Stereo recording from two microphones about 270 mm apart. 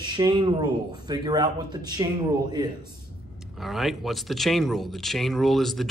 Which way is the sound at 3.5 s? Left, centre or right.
Centre.